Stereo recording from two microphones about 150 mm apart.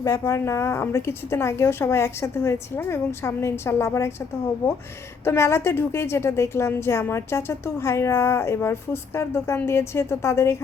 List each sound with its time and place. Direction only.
0.0 s a woman's voice: 20° left (ahead or behind)
5.2 s a woman's voice: 15° left (ahead or behind)